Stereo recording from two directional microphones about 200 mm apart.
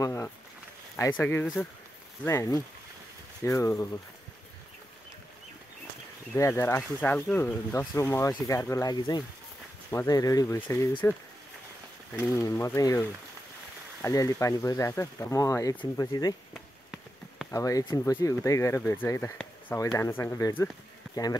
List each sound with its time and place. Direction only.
0.0 s speech: 15° left (ahead or behind)
6.3 s speech: 15° left (ahead or behind)
12.2 s speech: 15° left (ahead or behind)
17.5 s speech: 15° left (ahead or behind)